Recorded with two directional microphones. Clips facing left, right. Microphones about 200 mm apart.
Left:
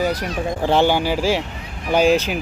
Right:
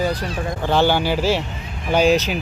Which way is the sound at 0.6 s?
25° left (ahead or behind).